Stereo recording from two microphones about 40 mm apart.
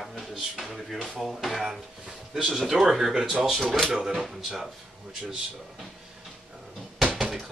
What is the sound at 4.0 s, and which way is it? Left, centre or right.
Speech, centre.